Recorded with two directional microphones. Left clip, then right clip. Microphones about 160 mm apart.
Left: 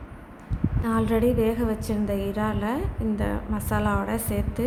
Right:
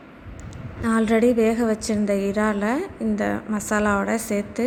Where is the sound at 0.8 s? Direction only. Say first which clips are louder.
Right 5 dB; 30° right (ahead or behind).